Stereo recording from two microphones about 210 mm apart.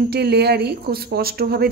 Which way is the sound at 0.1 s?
50° right (ahead or behind).